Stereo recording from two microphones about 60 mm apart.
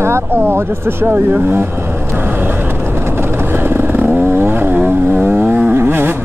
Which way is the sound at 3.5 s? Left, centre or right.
Right.